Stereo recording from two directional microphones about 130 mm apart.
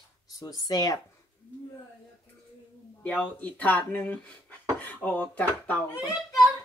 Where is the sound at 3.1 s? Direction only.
10° left (ahead or behind).